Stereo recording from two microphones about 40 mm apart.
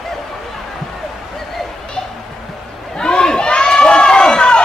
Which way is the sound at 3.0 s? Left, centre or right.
Centre.